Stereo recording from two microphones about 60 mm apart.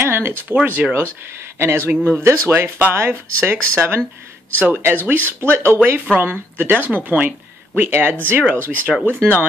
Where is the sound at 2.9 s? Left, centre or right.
Right.